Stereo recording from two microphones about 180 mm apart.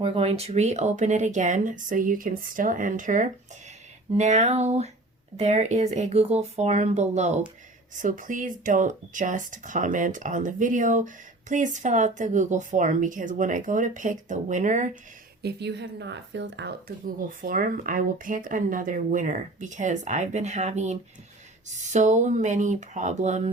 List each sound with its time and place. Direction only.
0.0 s speech: 30° right (ahead or behind)
15.4 s a woman's voice: 65° right (ahead or behind)
17.2 s speech: 50° right (ahead or behind)